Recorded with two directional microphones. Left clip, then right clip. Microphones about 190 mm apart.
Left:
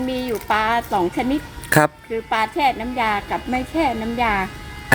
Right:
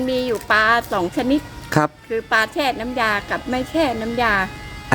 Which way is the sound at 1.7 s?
Centre (ahead or behind).